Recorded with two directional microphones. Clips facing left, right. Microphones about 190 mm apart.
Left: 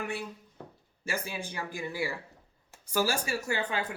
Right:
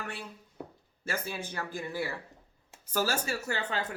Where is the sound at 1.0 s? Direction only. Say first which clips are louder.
Even; 10° left (ahead or behind).